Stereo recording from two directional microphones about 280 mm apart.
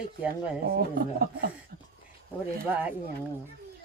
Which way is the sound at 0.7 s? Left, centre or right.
Right.